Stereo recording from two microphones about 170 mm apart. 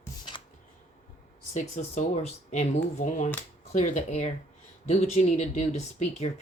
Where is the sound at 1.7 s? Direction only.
45° left (ahead or behind).